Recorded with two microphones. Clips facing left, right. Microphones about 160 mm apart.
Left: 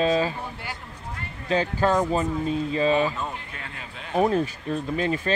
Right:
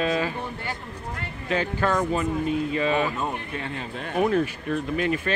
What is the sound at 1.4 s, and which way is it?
Speech, 30° left (ahead or behind).